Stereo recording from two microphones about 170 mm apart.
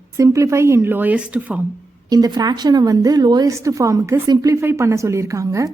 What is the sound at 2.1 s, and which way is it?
A woman's voice, 25° right (ahead or behind).